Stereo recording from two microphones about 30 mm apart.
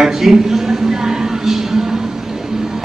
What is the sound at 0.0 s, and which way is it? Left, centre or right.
Music, centre.